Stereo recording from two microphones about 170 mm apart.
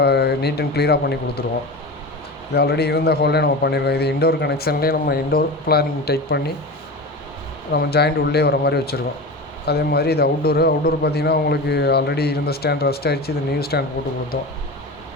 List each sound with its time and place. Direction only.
0.0 s speech: 75° left (ahead or behind)
2.5 s a man's voice: 70° left (ahead or behind)
7.7 s a man's voice: 75° left (ahead or behind)